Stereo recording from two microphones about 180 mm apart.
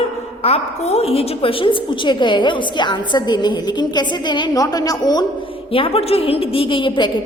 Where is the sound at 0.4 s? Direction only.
35° left (ahead or behind).